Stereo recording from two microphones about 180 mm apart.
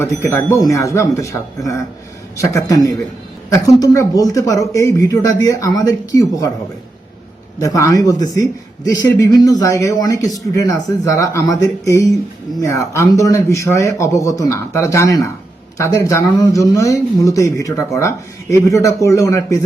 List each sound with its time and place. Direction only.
0.0 s a man's voice: 15° left (ahead or behind)
7.6 s a man's voice: 20° left (ahead or behind)